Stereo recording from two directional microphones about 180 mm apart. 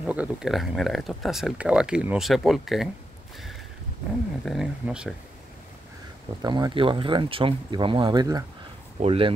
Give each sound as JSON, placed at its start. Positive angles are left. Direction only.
{"t": 0.0, "sound": "speech", "side_deg": -10}
{"t": 4.5, "sound": "speech", "side_deg": -5}
{"t": 6.4, "sound": "speech", "side_deg": -25}